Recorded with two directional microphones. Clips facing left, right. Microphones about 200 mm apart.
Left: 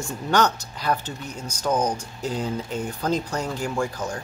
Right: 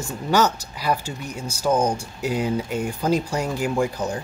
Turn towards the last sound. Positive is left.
turn(degrees=-15)  # may be behind; listen again after turning